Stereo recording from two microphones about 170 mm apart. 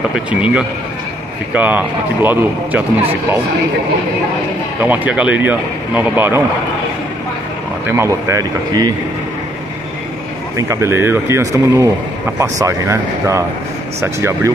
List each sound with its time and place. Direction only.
0.3 s speech: 10° right (ahead or behind)
4.8 s speech: 10° right (ahead or behind)
7.8 s speech: 15° right (ahead or behind)
10.7 s speech: 15° right (ahead or behind)